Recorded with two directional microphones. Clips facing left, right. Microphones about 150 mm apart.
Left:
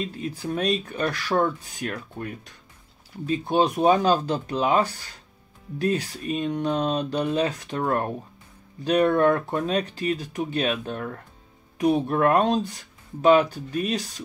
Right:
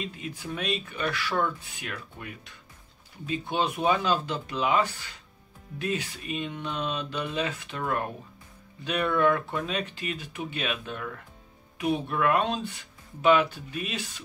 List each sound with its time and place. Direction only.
0.0 s speech: 35° left (ahead or behind)